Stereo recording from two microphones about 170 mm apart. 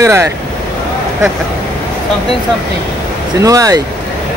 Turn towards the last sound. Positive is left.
turn(degrees=-20)  # may be behind; listen again after turning